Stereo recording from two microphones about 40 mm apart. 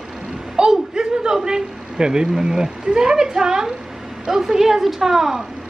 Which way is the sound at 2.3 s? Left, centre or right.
Centre.